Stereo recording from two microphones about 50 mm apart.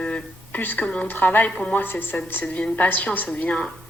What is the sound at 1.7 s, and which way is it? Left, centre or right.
A woman's voice, left.